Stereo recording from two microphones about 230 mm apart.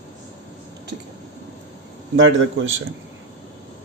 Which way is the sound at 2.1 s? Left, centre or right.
Right.